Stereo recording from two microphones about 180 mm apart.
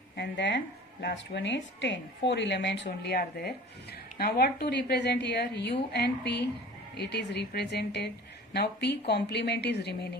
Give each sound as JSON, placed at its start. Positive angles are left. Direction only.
{"t": 0.2, "sound": "a woman's voice", "side_deg": 75}